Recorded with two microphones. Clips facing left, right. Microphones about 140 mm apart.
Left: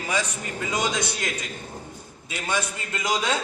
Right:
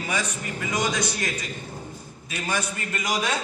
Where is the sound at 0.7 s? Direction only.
20° left (ahead or behind).